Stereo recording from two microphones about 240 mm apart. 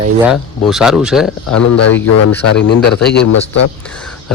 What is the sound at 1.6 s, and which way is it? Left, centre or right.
Speech, left.